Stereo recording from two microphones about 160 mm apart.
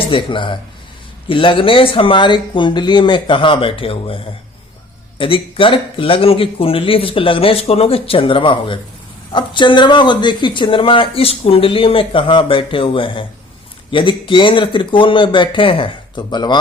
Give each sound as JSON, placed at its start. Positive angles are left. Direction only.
{"t": 0.1, "sound": "speech", "side_deg": 30}